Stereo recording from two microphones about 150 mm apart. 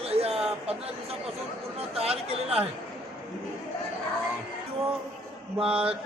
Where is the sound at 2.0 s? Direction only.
40° right (ahead or behind).